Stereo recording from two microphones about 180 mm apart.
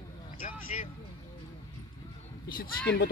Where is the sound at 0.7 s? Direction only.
40° left (ahead or behind).